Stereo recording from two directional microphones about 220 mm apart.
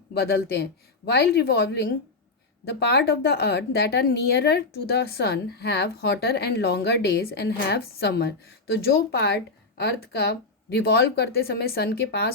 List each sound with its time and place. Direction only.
0.1 s a woman's voice: 45° left (ahead or behind)